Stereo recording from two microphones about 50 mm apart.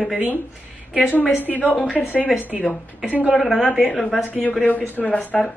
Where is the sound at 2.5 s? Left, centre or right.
Centre.